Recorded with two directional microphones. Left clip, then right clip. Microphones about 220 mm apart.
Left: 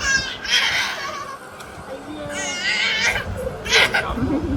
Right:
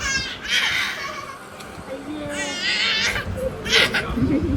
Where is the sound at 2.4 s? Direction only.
10° right (ahead or behind).